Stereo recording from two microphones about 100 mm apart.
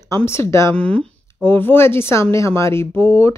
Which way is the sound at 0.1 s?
25° left (ahead or behind).